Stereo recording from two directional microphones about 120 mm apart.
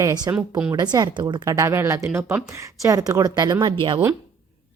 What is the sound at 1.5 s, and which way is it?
A woman's voice, 20° right (ahead or behind).